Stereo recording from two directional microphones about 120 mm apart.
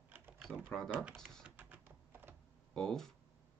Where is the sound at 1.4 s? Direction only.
15° right (ahead or behind).